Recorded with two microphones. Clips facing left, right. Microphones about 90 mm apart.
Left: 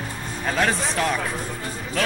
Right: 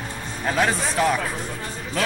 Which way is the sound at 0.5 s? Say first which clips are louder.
Right 1 dB; 5° right (ahead or behind).